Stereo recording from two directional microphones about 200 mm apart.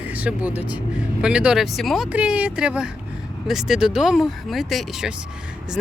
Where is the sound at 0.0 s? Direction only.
10° right (ahead or behind).